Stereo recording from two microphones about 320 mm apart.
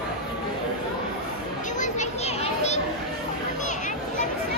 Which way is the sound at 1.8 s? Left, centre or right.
Left.